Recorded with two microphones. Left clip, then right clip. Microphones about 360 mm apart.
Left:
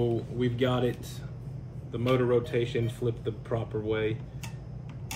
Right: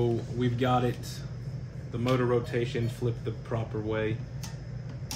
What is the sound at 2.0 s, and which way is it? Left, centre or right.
Speech, centre.